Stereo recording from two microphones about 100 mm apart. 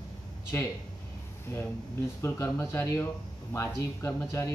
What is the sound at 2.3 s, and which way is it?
Speech, 30° left (ahead or behind).